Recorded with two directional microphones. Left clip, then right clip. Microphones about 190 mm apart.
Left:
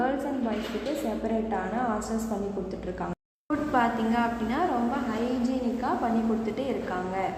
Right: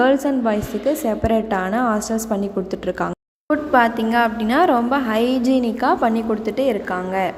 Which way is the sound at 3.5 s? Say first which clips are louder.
Right 9 dB; 40° right (ahead or behind).